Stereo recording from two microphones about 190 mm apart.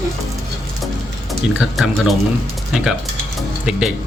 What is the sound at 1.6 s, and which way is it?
Speech, centre (ahead or behind).